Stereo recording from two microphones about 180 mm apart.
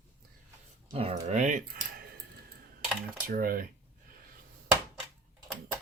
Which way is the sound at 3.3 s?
50° right (ahead or behind).